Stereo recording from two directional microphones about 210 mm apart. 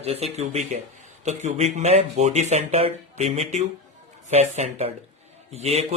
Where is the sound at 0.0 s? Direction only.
30° right (ahead or behind).